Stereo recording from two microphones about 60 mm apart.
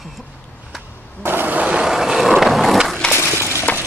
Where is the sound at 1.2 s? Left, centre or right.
Right.